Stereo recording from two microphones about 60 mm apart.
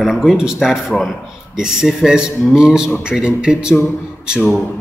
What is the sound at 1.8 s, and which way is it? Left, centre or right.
Speech, centre.